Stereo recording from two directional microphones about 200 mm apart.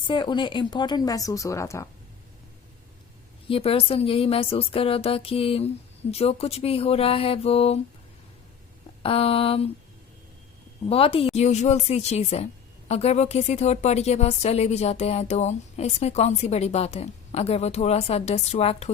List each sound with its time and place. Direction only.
0.1 s speech: 25° left (ahead or behind)
3.5 s speech: 30° left (ahead or behind)
9.0 s speech: 30° left (ahead or behind)
10.8 s speech: 30° left (ahead or behind)